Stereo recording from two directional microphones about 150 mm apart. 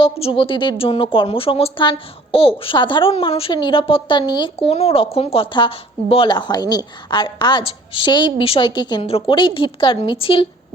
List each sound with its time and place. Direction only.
0.0 s a woman's voice: 40° left (ahead or behind)